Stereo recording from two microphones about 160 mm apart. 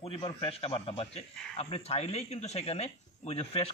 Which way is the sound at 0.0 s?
40° left (ahead or behind).